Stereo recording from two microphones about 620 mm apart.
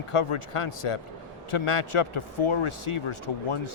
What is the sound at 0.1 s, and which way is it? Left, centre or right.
Speech, left.